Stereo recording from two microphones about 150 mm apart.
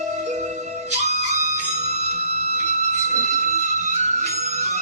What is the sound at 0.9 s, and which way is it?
Flute, 50° right (ahead or behind).